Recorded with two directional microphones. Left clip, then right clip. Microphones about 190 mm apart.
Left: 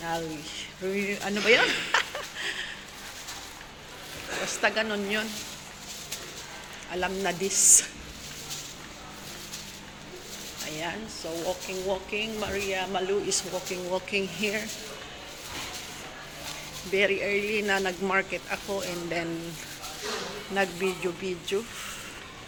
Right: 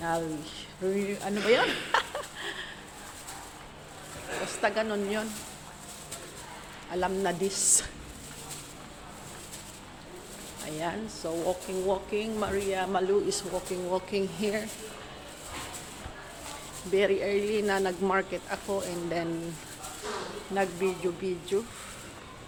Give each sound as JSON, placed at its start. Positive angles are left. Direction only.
{"t": 0.0, "sound": "speech", "side_deg": -20}
{"t": 0.9, "sound": "speech", "side_deg": -5}
{"t": 4.6, "sound": "speech", "side_deg": -10}
{"t": 6.9, "sound": "speech", "side_deg": -15}
{"t": 10.7, "sound": "speech", "side_deg": -20}
{"t": 16.9, "sound": "speech", "side_deg": -20}
{"t": 20.6, "sound": "speech", "side_deg": 0}